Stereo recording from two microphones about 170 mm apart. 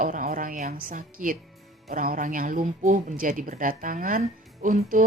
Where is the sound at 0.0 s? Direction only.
55° right (ahead or behind).